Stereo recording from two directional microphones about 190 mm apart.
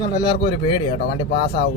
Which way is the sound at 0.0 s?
25° left (ahead or behind).